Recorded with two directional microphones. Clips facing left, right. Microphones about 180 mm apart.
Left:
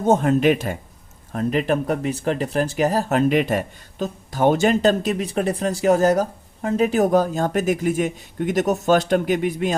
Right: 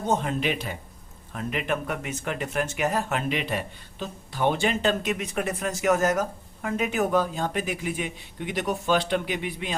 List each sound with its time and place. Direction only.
0.0 s speech: 45° left (ahead or behind)